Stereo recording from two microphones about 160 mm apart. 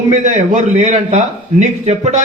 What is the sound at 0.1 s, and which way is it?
A man's voice, 50° right (ahead or behind).